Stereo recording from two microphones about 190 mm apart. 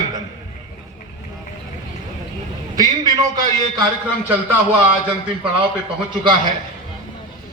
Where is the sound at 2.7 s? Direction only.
20° right (ahead or behind).